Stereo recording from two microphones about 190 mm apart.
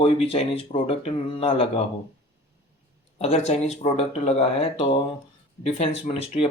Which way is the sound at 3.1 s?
35° left (ahead or behind).